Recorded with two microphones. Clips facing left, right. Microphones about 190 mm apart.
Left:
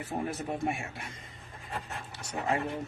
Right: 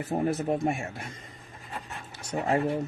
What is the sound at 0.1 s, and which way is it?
Speech, 40° right (ahead or behind).